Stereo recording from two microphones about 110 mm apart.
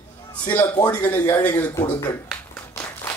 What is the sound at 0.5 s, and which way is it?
A man's voice, 15° left (ahead or behind).